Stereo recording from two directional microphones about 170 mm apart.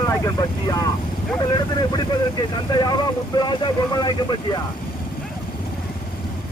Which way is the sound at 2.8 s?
25° left (ahead or behind).